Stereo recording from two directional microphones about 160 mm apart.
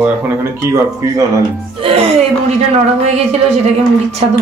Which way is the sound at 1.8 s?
35° right (ahead or behind).